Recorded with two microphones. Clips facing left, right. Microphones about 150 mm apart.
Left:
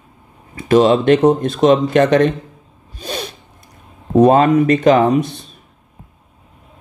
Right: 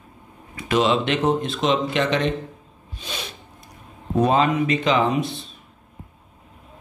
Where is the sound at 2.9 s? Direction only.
45° left (ahead or behind).